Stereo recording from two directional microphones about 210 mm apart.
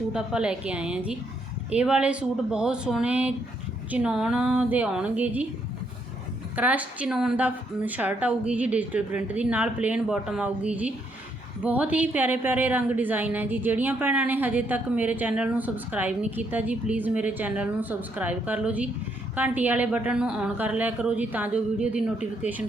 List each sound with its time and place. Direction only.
0.1 s speech: 5° right (ahead or behind)
6.6 s a woman's voice: 5° right (ahead or behind)